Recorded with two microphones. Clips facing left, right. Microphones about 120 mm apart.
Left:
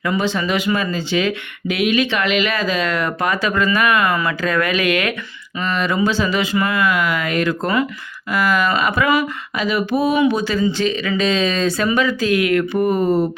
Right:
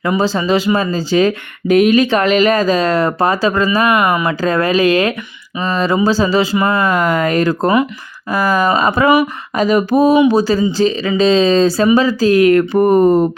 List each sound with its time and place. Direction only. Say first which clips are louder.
0.2 s speech: right 5 dB; 35° right (ahead or behind)
3.9 s speech: right 4 dB; 20° right (ahead or behind)
4.3 s speech: right 5 dB; 35° right (ahead or behind)
6.7 s speech: right 4 dB; 45° right (ahead or behind)